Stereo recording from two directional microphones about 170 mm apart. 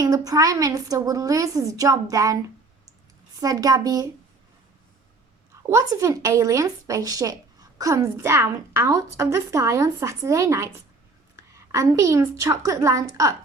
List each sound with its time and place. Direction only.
0.0 s speech: 20° right (ahead or behind)
3.4 s speech: 20° right (ahead or behind)
5.6 s speech: 20° right (ahead or behind)